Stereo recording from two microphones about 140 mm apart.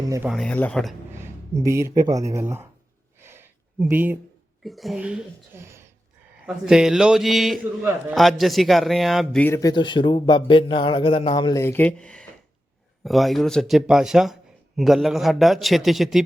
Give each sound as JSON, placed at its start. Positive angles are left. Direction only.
{"t": 0.3, "sound": "a man's voice", "side_deg": 5}
{"t": 1.1, "sound": "speech", "side_deg": -20}
{"t": 3.2, "sound": "a sound", "side_deg": -15}
{"t": 4.6, "sound": "a man's voice", "side_deg": 0}
{"t": 5.5, "sound": "a sound", "side_deg": -20}
{"t": 6.4, "sound": "a man's voice", "side_deg": -5}
{"t": 9.4, "sound": "a man's voice", "side_deg": 20}
{"t": 11.5, "sound": "a man's voice", "side_deg": 15}